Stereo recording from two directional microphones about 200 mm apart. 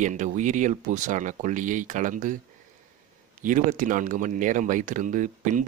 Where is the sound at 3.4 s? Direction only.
40° right (ahead or behind).